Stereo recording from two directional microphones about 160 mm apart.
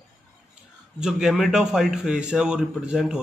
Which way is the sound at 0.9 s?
5° right (ahead or behind).